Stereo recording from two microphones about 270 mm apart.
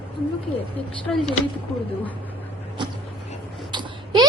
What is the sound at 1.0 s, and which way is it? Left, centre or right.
Speech, centre.